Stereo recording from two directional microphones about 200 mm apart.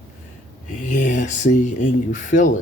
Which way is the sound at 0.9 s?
40° left (ahead or behind).